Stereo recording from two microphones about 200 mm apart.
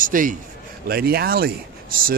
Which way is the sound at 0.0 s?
40° right (ahead or behind).